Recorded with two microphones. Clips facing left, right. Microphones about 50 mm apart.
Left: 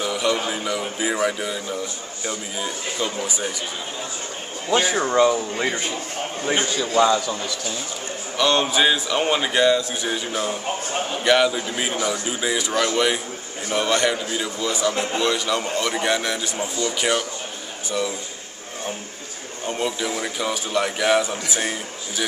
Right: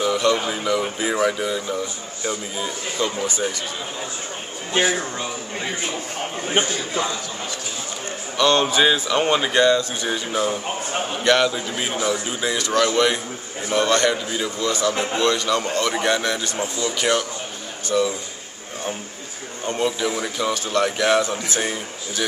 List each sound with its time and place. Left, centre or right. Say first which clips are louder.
0.0 s a man's voice: right 3 dB; centre
5.1 s speech: left 10 dB; left
8.4 s a man's voice: right 2 dB; centre
11.2 s a man's voice: even; centre
19.6 s a man's voice: right 3 dB; centre